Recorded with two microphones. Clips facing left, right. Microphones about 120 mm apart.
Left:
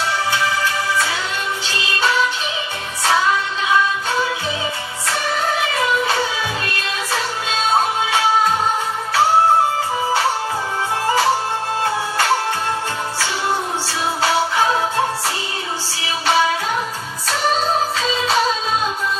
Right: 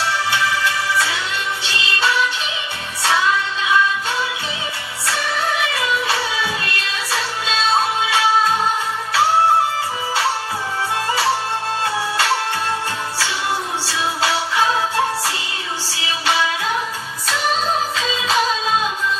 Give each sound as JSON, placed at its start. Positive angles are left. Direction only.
{"t": 5.8, "sound": "music", "side_deg": 45}
{"t": 13.8, "sound": "music", "side_deg": 40}
{"t": 15.9, "sound": "music", "side_deg": 40}
{"t": 17.9, "sound": "music", "side_deg": 40}